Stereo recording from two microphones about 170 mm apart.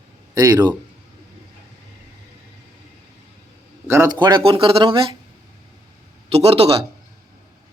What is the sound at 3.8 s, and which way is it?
Speech, 15° right (ahead or behind).